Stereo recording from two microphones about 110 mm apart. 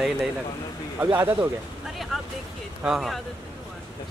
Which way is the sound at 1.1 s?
20° right (ahead or behind).